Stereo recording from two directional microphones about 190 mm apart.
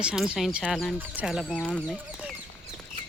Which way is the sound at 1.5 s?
5° left (ahead or behind).